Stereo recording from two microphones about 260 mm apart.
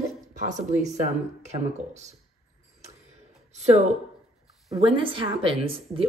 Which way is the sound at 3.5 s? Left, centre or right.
Right.